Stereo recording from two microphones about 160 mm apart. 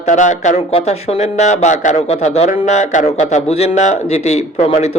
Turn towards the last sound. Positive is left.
turn(degrees=40)  # may be behind; listen again after turning